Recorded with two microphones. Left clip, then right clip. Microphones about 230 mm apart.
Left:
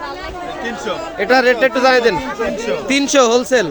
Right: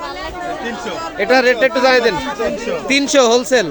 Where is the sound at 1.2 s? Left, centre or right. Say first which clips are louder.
Even; centre.